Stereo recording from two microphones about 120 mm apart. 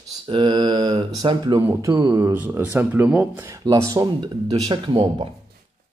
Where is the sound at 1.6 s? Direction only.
25° right (ahead or behind).